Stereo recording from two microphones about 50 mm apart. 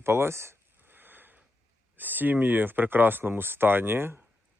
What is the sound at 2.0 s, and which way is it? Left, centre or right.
Speech, right.